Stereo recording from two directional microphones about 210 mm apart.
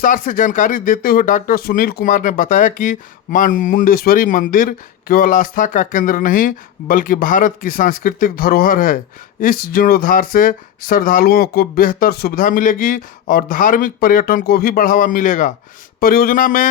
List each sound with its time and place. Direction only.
0.0 s speech: 40° left (ahead or behind)